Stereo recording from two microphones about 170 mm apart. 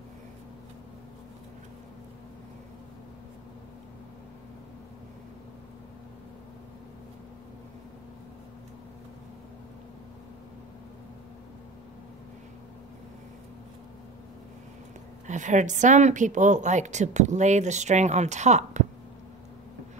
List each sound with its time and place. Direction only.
15.2 s a woman's voice: 45° right (ahead or behind)